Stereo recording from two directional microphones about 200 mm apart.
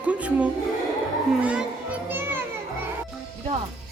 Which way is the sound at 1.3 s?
5° right (ahead or behind).